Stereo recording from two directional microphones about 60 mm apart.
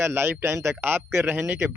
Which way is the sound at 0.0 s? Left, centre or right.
Right.